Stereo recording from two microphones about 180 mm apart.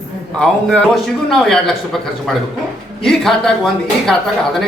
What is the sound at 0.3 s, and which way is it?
A woman's voice, 5° left (ahead or behind).